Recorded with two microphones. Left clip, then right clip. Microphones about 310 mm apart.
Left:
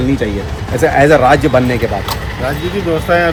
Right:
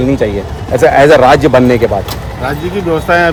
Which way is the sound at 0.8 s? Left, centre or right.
Right.